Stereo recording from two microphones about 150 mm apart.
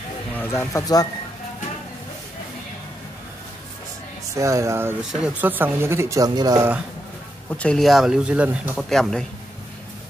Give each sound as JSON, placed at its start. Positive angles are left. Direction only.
{"t": 0.3, "sound": "speech", "side_deg": 15}
{"t": 4.4, "sound": "speech", "side_deg": -20}
{"t": 7.5, "sound": "speech", "side_deg": 5}
{"t": 8.7, "sound": "speech", "side_deg": 0}